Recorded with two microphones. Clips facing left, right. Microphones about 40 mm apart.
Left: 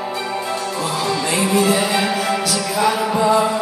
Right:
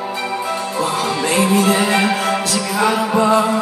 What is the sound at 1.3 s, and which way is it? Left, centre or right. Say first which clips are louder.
Music: right 2 dB; right.